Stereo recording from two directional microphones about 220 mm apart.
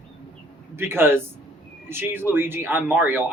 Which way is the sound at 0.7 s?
10° right (ahead or behind).